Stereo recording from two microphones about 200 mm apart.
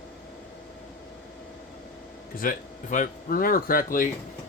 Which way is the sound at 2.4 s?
40° left (ahead or behind).